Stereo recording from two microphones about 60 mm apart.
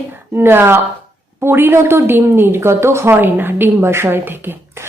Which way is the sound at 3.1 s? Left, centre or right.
Right.